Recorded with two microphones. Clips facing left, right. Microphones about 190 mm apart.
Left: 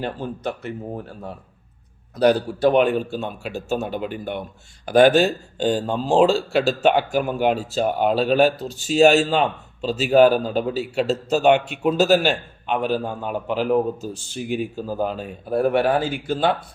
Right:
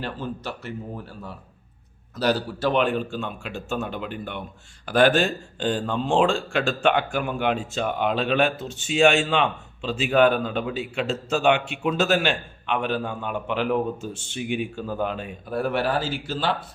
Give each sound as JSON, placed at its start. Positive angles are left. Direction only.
{"t": 0.0, "sound": "a man's voice", "side_deg": 50}
{"t": 2.1, "sound": "a man's voice", "side_deg": 50}
{"t": 15.1, "sound": "speech", "side_deg": 5}
{"t": 15.4, "sound": "speech", "side_deg": 40}
{"t": 15.7, "sound": "a man's voice", "side_deg": 55}